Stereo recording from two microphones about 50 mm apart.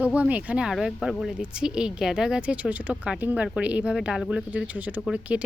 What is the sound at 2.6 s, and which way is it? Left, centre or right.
Speech, right.